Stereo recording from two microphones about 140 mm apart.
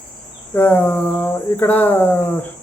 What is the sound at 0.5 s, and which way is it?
Speech, 10° left (ahead or behind).